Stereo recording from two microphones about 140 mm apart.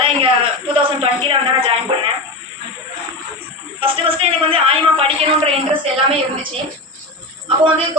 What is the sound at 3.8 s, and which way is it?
A man's voice, 40° right (ahead or behind).